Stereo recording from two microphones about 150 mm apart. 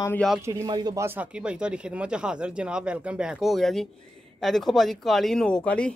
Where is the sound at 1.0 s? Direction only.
10° right (ahead or behind); by 5.9 s 5° left (ahead or behind).